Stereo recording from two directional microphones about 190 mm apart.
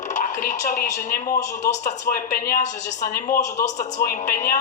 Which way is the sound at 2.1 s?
50° left (ahead or behind).